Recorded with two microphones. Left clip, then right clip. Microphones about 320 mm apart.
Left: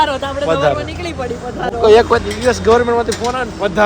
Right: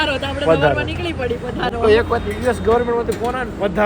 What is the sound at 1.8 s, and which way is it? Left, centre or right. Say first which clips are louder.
Speech: left 6 dB; centre.